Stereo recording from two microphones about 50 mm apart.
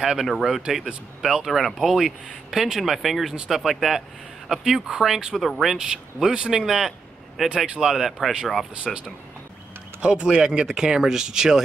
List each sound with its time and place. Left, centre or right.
0.0 s speech: centre
5.8 s speech: centre
7.9 s speech: centre
8.8 s speech: centre